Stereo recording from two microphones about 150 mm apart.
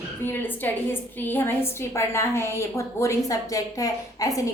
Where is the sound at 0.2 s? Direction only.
15° left (ahead or behind).